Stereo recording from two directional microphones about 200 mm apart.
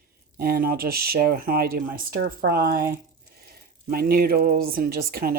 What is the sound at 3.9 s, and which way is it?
Speech, 50° right (ahead or behind).